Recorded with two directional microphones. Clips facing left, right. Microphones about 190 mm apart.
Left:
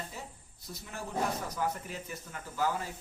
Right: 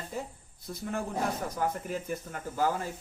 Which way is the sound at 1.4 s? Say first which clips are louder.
Right 3 dB; 50° right (ahead or behind).